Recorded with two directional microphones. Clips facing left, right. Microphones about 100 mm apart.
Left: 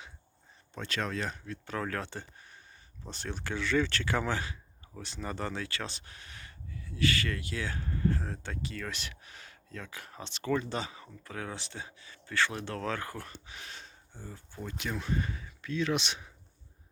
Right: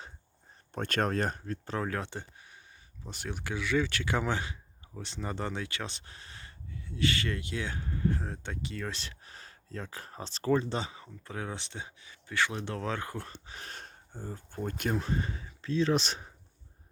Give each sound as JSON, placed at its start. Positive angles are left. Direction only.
{"t": 0.7, "sound": "speech", "side_deg": -50}
{"t": 1.8, "sound": "speech", "side_deg": -20}
{"t": 14.9, "sound": "speech", "side_deg": -30}